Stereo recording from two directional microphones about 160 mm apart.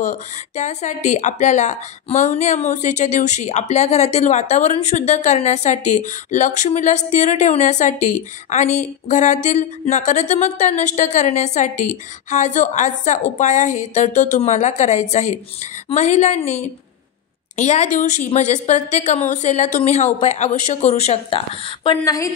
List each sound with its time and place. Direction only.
0.0 s a woman's voice: 50° left (ahead or behind)
21.8 s speech: 20° left (ahead or behind)